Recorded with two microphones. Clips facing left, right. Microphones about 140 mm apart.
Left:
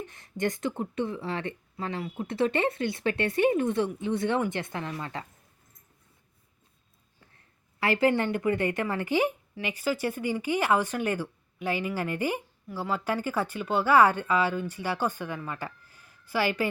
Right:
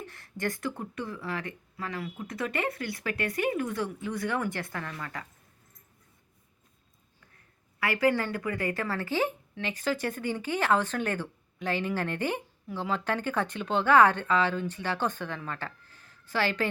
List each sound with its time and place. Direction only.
0.0 s speech: 20° left (ahead or behind)
7.8 s a woman's voice: 25° left (ahead or behind); by 15.4 s 10° left (ahead or behind)
15.4 s a sound: 10° left (ahead or behind)